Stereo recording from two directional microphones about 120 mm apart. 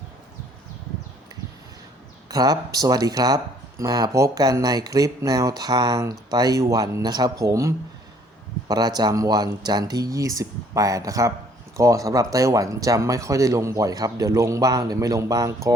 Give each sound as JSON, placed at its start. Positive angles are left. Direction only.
{"t": 2.3, "sound": "speech", "side_deg": -30}